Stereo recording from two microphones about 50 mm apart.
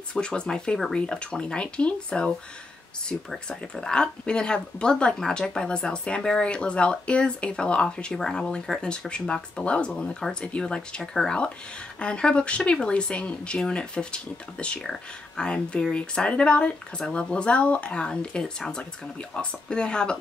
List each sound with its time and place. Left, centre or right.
0.1 s speech: centre
11.0 s speech: centre
12.0 s speech: left
14.8 s speech: centre
15.4 s speech: centre